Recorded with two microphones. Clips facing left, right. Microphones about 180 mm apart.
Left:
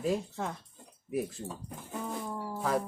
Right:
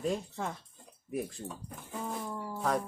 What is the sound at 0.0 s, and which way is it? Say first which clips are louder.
Speech: left 2 dB; centre (ahead or behind).